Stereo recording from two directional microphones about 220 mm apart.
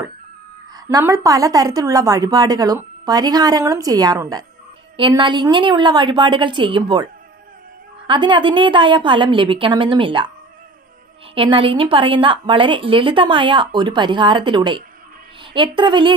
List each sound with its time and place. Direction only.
0.7 s a woman's voice: 15° right (ahead or behind)
8.1 s a woman's voice: 20° right (ahead or behind)
11.3 s a woman's voice: 25° right (ahead or behind)